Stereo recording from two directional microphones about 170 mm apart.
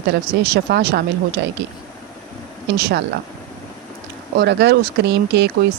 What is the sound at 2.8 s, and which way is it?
Speech, 75° right (ahead or behind).